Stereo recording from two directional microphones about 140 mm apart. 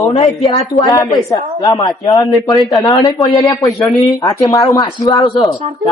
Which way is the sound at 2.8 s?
25° left (ahead or behind).